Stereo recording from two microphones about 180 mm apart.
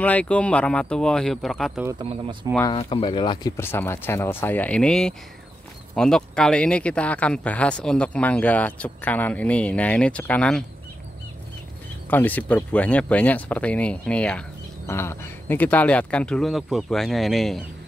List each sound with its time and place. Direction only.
0.0 s speech: 10° left (ahead or behind)
2.6 s speech: 30° left (ahead or behind)
3.5 s speech: 10° left (ahead or behind)
12.1 s speech: 10° left (ahead or behind)